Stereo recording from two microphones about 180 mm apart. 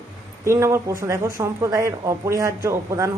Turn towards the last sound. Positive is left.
turn(degrees=-15)  # may be behind; listen again after turning